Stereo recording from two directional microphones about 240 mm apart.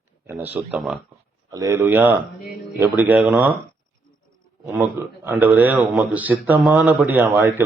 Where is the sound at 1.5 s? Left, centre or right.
Centre.